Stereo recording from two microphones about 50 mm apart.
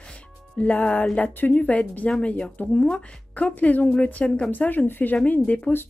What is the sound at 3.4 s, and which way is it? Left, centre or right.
Speech, left.